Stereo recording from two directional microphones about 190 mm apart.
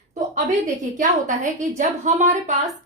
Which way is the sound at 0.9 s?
40° right (ahead or behind).